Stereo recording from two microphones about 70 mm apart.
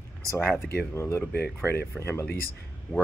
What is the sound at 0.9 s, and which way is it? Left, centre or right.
Speech, left.